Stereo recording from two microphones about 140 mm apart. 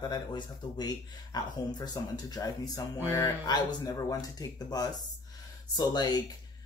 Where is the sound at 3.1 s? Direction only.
15° left (ahead or behind).